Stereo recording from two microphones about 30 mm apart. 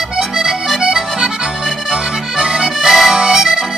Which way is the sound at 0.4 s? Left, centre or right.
Centre.